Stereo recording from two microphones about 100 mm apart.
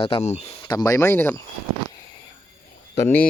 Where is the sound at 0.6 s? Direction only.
40° left (ahead or behind); by 1.4 s 25° left (ahead or behind).